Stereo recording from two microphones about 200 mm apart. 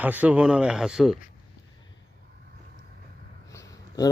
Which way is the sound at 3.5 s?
15° left (ahead or behind).